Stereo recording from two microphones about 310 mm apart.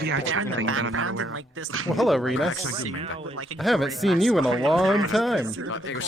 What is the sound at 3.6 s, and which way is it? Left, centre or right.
Speech, centre.